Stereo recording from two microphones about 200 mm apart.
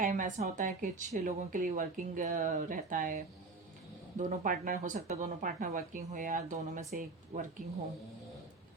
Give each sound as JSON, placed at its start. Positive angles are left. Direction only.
{"t": 0.0, "sound": "speech", "side_deg": -40}
{"t": 4.2, "sound": "speech", "side_deg": -40}